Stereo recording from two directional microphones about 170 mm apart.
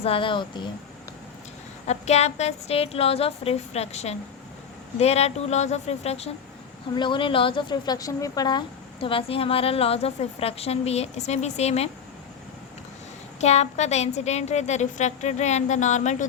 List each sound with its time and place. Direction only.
0.0 s speech: 30° left (ahead or behind)
1.9 s a woman's voice: 40° left (ahead or behind)
13.4 s a woman's voice: 40° left (ahead or behind)